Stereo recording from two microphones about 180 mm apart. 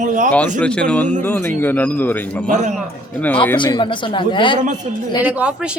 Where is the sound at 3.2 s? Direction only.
10° left (ahead or behind).